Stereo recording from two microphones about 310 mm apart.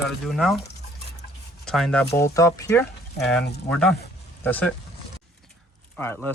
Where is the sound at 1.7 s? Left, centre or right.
Centre.